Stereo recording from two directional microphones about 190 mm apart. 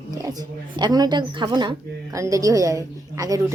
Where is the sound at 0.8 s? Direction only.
20° right (ahead or behind).